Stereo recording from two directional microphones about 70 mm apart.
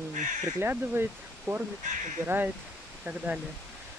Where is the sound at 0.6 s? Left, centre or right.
Right.